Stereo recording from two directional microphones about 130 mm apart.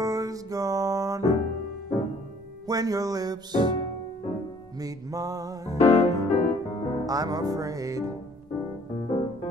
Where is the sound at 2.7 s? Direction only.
30° right (ahead or behind).